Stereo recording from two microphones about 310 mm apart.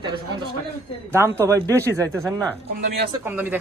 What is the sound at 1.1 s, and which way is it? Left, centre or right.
A man's voice, centre.